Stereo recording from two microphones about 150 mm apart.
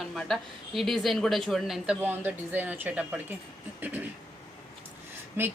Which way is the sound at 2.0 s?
15° right (ahead or behind).